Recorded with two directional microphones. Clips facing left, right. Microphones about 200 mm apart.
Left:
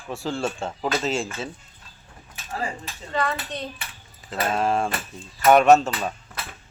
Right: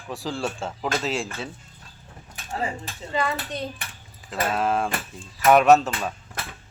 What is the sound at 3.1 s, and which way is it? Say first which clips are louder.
A child's voice: even; 10° right (ahead or behind).